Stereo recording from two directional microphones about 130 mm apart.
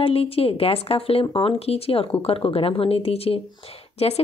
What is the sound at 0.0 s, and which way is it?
Speech, 45° left (ahead or behind).